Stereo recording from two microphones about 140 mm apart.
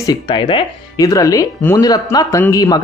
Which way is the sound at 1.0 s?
25° left (ahead or behind).